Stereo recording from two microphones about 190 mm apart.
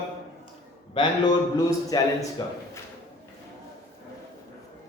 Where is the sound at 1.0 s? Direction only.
20° left (ahead or behind).